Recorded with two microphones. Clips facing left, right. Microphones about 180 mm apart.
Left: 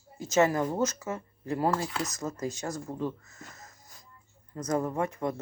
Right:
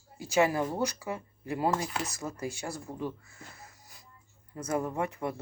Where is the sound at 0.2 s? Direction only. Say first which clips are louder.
Left 2 dB; 15° right (ahead or behind).